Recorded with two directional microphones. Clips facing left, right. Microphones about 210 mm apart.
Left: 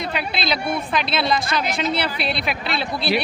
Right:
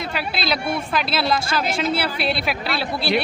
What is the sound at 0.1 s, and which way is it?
A woman's voice, 5° right (ahead or behind).